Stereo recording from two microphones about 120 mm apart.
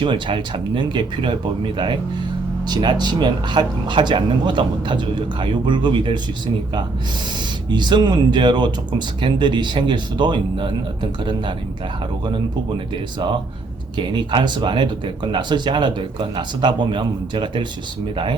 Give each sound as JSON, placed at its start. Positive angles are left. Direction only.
{"t": 0.0, "sound": "speech", "side_deg": -45}
{"t": 7.7, "sound": "speech", "side_deg": -40}
{"t": 13.9, "sound": "speech", "side_deg": -40}